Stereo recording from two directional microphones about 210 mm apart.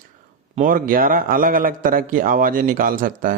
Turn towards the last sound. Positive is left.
turn(degrees=-40)  # may be behind; listen again after turning